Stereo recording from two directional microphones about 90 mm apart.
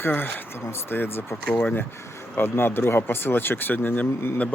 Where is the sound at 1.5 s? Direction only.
10° left (ahead or behind).